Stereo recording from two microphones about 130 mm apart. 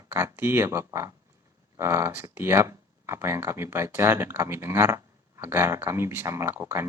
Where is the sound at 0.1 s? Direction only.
20° right (ahead or behind).